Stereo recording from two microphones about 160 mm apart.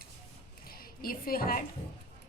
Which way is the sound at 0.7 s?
65° left (ahead or behind).